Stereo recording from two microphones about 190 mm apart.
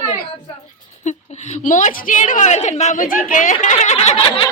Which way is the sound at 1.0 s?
40° left (ahead or behind).